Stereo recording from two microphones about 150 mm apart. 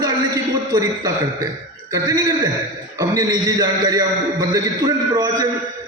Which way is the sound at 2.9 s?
20° right (ahead or behind).